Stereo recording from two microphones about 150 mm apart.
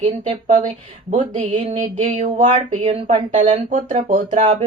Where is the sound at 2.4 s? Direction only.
45° right (ahead or behind).